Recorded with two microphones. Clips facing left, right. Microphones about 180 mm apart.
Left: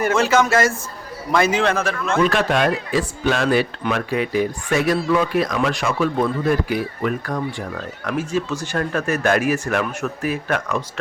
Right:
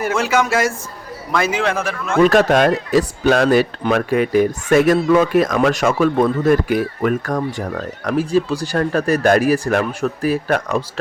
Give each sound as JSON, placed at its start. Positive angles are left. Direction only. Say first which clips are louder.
{"t": 0.0, "sound": "a man's voice", "louder": "left 1 dB", "side_deg": -10}
{"t": 2.2, "sound": "speech", "louder": "right 7 dB", "side_deg": -40}